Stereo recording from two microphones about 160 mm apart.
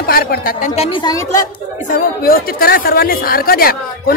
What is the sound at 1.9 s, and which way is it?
A woman's voice, 70° left (ahead or behind).